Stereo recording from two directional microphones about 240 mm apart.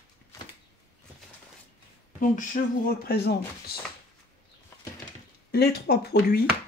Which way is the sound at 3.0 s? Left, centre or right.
Left.